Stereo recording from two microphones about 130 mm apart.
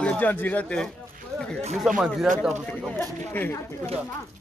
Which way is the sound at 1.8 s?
5° right (ahead or behind).